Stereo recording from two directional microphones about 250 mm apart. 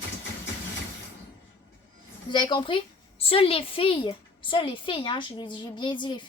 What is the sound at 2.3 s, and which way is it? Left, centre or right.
A woman's voice, centre.